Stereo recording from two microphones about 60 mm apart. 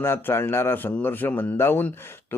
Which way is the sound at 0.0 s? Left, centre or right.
Left.